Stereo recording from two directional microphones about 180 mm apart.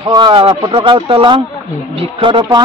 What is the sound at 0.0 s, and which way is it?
A woman's voice, 25° right (ahead or behind).